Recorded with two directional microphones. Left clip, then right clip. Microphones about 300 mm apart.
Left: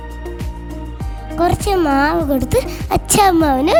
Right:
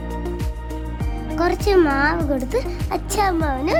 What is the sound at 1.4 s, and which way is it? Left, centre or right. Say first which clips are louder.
Speech: left 2 dB; left.